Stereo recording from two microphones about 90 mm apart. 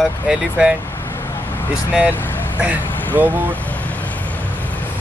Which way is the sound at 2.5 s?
15° right (ahead or behind).